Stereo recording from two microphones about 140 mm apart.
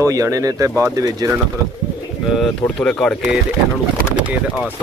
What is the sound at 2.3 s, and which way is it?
Speech, 5° left (ahead or behind).